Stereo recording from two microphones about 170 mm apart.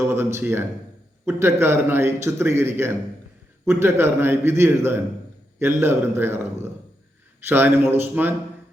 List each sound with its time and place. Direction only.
0.0 s a man's voice: 15° right (ahead or behind)